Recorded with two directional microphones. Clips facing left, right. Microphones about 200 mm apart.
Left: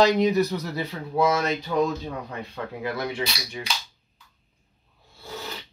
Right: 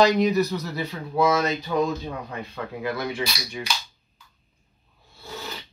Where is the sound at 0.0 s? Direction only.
25° left (ahead or behind).